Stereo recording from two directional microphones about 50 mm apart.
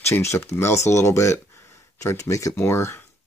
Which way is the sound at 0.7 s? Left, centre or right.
Left.